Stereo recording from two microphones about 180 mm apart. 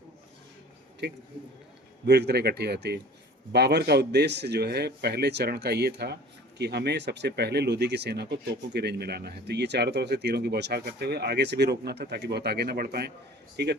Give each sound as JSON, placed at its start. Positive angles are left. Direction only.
{"t": 2.0, "sound": "speech", "side_deg": -65}